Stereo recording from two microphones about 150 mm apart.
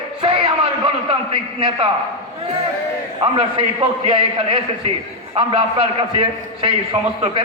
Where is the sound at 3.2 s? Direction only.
35° right (ahead or behind).